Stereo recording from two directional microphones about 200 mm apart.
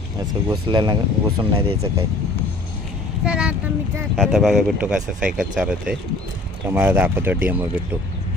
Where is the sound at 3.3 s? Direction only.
5° right (ahead or behind).